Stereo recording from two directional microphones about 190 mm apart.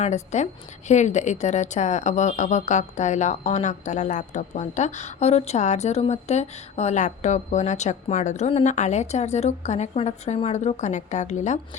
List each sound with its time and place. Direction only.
0.0 s speech: 40° left (ahead or behind)